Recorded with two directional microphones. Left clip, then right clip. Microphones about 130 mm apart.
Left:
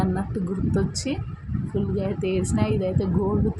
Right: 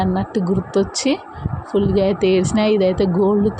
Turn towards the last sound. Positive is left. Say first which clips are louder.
# right 9 dB
turn(degrees=-30)  # may be behind; listen again after turning